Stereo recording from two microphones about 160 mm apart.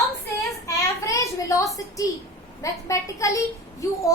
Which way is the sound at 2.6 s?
20° left (ahead or behind).